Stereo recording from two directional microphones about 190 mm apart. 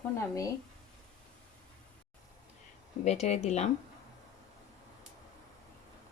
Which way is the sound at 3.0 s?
35° left (ahead or behind).